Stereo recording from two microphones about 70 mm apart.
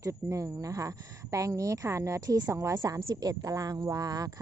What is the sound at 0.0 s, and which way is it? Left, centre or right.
A woman's voice, right.